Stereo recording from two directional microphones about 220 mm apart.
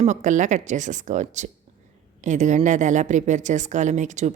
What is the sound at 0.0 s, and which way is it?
A woman's voice, 35° right (ahead or behind).